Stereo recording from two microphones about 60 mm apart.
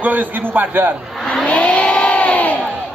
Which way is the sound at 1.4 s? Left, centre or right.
Left.